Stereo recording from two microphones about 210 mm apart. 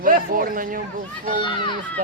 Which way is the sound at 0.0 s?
40° right (ahead or behind).